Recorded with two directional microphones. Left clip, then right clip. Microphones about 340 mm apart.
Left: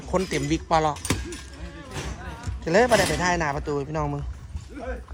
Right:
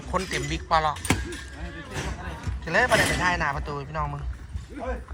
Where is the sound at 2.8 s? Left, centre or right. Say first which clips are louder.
Even; left.